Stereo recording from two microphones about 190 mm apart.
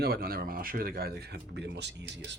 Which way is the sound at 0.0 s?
55° right (ahead or behind).